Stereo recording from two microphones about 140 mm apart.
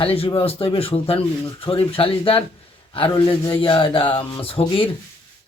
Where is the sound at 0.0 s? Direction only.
45° left (ahead or behind).